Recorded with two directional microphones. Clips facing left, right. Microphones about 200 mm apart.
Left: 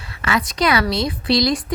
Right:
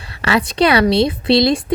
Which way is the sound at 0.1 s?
30° right (ahead or behind).